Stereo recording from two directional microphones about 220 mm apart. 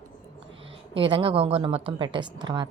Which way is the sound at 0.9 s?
25° right (ahead or behind).